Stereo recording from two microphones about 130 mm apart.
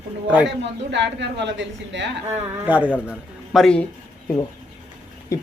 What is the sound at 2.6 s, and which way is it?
A man's voice, 10° right (ahead or behind).